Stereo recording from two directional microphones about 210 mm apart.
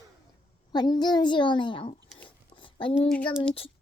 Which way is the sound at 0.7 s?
20° left (ahead or behind).